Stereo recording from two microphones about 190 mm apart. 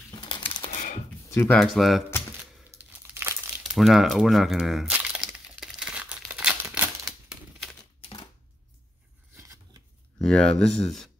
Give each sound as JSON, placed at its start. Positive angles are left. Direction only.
{"t": 0.1, "sound": "a sound", "side_deg": 25}
{"t": 1.3, "sound": "speech", "side_deg": 15}
{"t": 1.6, "sound": "speech", "side_deg": 0}
{"t": 2.8, "sound": "crumpling", "side_deg": -15}
{"t": 3.7, "sound": "a sound", "side_deg": 0}
{"t": 9.4, "sound": "scissors", "side_deg": -15}
{"t": 10.2, "sound": "speech", "side_deg": 5}